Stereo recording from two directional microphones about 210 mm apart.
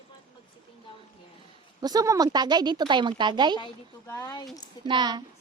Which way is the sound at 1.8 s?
15° right (ahead or behind).